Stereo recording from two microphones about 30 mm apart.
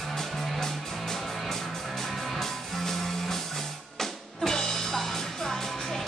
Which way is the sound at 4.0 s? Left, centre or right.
Centre.